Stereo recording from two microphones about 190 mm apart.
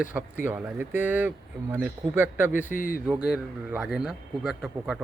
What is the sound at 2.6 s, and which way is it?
Speech, 45° left (ahead or behind).